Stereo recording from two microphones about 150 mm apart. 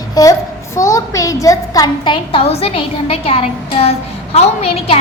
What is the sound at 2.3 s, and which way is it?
A woman's voice, 40° left (ahead or behind).